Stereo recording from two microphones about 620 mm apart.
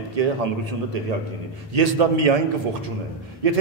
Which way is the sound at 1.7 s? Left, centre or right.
Right.